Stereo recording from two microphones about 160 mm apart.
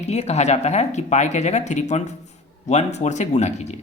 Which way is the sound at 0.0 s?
45° left (ahead or behind).